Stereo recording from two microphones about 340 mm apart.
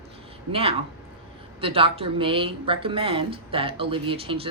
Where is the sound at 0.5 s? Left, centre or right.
Centre.